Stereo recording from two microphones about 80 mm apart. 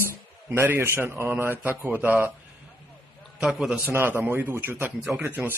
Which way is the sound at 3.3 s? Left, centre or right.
Centre.